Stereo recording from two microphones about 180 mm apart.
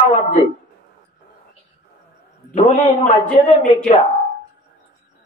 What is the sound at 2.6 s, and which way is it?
Speech, 40° left (ahead or behind).